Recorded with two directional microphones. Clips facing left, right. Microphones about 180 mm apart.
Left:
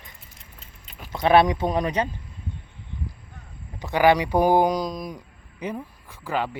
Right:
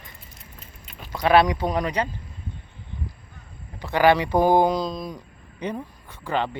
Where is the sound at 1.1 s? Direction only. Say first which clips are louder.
Even; 20° left (ahead or behind).